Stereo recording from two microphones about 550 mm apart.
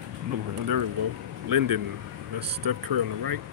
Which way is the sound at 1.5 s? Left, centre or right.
Right.